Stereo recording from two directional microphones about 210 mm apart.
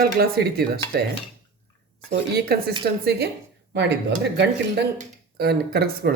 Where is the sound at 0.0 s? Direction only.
45° right (ahead or behind).